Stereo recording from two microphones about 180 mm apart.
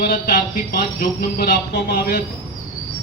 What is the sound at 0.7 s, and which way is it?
Speech, 60° left (ahead or behind).